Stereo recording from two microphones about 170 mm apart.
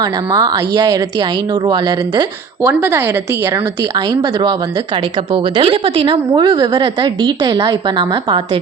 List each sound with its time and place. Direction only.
0.0 s a woman's voice: 20° right (ahead or behind)
2.6 s a woman's voice: 15° right (ahead or behind)